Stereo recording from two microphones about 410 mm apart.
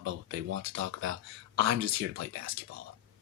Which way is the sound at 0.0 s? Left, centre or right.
Right.